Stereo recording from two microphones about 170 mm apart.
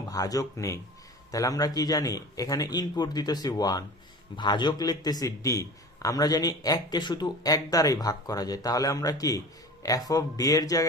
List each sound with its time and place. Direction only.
0.1 s a man's voice: 20° left (ahead or behind)